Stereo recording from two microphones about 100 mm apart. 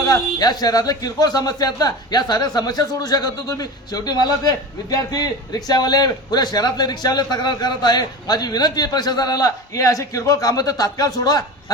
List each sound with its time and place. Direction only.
0.0 s speech: 40° left (ahead or behind)